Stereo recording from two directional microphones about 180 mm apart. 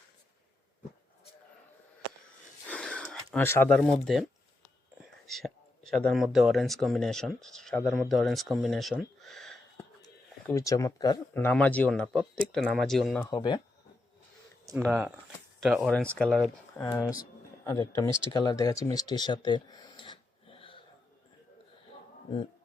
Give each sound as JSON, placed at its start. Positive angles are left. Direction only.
{"t": 2.6, "sound": "a sound", "side_deg": 5}
{"t": 3.9, "sound": "speech", "side_deg": 0}
{"t": 10.5, "sound": "speech", "side_deg": 20}
{"t": 11.3, "sound": "speech", "side_deg": 10}
{"t": 13.3, "sound": "speech", "side_deg": 25}
{"t": 14.8, "sound": "speech", "side_deg": -10}
{"t": 16.8, "sound": "speech", "side_deg": 20}